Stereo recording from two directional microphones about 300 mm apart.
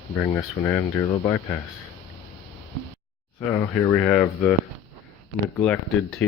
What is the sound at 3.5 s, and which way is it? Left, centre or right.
Speech, centre.